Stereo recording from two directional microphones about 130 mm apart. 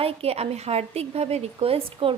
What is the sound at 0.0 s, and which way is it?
A woman's voice, 50° right (ahead or behind).